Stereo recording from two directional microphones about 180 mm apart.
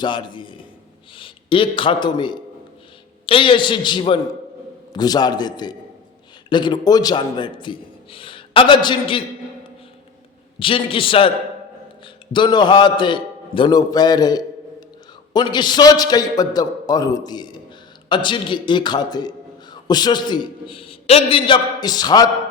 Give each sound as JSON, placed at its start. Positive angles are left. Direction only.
{"t": 0.0, "sound": "a man's voice", "side_deg": 25}
{"t": 10.6, "sound": "a man's voice", "side_deg": 30}